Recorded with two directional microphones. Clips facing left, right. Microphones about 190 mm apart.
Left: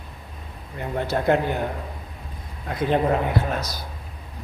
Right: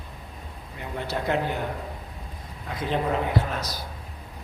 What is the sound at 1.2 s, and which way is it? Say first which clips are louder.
Speech: left 7 dB; 50° left (ahead or behind).